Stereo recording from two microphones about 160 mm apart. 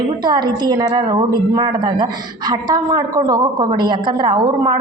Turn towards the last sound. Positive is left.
turn(degrees=-25)  # may be behind; listen again after turning